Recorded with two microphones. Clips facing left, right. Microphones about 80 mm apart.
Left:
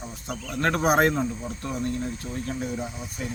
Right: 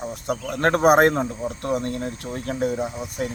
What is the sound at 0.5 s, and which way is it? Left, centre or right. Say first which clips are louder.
Speech: right 5 dB; right.